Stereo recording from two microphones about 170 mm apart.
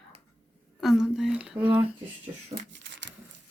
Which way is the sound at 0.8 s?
Centre (ahead or behind).